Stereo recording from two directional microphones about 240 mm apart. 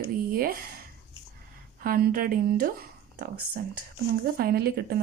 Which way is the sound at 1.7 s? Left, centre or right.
Right.